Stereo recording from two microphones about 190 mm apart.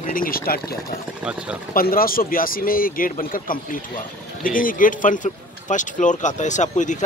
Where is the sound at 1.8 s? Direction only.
50° left (ahead or behind).